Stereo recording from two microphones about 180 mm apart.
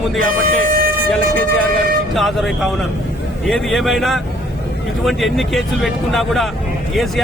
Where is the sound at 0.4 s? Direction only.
50° right (ahead or behind).